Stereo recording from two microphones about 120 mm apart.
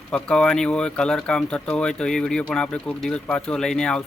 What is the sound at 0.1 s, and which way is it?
Speech, 5° left (ahead or behind).